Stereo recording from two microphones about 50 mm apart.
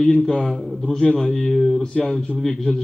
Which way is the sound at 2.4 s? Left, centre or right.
Centre.